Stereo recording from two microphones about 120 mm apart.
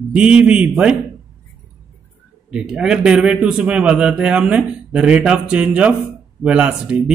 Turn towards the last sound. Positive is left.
turn(degrees=-10)  # may be behind; listen again after turning